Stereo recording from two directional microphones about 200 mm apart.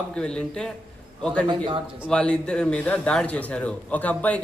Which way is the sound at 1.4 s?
25° right (ahead or behind).